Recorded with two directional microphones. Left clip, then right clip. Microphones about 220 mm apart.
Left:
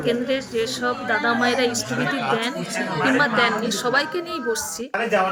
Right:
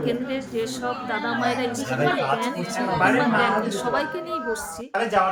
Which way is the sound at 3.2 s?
20° left (ahead or behind).